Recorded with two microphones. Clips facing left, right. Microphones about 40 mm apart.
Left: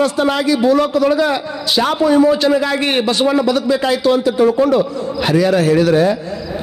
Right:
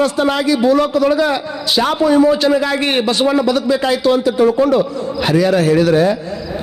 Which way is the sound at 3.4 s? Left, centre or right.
Centre.